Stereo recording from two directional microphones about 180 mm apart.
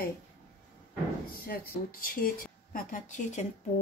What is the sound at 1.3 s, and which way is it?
A woman's voice, 55° left (ahead or behind).